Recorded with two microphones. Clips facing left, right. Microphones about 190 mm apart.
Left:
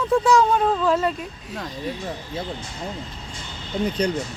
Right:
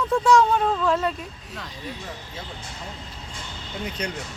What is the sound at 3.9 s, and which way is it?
Speech, 35° left (ahead or behind).